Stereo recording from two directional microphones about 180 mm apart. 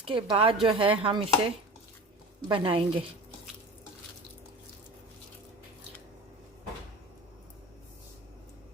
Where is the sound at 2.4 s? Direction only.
30° right (ahead or behind).